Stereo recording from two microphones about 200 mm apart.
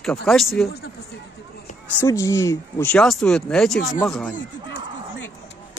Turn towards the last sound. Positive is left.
turn(degrees=5)  # may be behind; listen again after turning